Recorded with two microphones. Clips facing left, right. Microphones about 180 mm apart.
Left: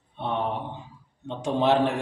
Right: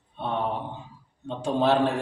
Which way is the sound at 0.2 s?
20° left (ahead or behind).